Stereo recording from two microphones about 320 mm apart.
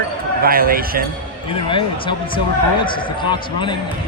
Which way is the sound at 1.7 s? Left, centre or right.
Centre.